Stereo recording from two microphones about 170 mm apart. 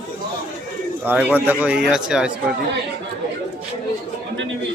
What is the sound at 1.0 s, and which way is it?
Speech, 10° right (ahead or behind).